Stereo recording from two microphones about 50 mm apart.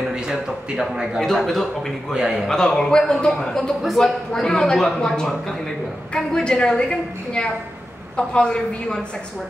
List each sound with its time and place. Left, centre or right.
0.1 s speech: centre
1.2 s a man's voice: centre
2.1 s speech: centre
2.4 s a woman's voice: centre
3.8 s a man's voice: centre
4.3 s a woman's voice: centre